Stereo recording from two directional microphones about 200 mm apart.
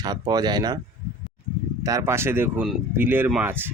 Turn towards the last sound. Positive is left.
turn(degrees=-10)  # may be behind; listen again after turning